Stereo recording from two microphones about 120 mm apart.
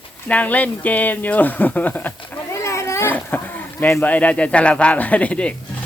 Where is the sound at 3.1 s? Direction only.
15° left (ahead or behind).